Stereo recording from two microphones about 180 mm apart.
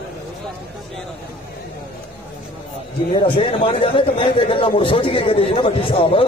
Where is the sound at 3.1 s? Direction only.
30° left (ahead or behind).